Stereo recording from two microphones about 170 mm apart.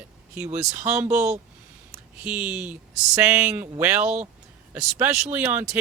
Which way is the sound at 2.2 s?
10° right (ahead or behind).